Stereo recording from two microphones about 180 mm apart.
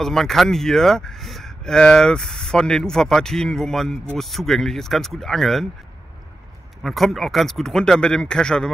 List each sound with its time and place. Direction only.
0.0 s speech: centre (ahead or behind)
6.8 s speech: centre (ahead or behind)